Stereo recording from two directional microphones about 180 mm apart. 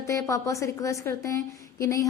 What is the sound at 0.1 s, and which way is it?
A woman's voice, 15° left (ahead or behind).